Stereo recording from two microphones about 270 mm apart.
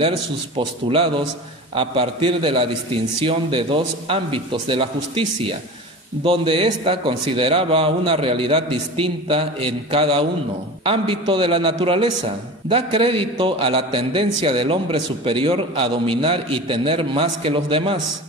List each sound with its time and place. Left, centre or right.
0.6 s a man's voice: centre
6.2 s a man's voice: centre